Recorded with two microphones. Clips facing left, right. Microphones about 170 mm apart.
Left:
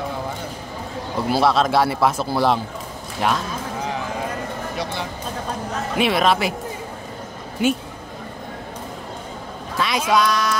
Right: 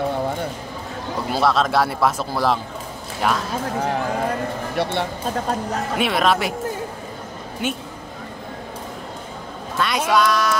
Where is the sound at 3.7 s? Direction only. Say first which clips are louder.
Right 5 dB; 60° right (ahead or behind).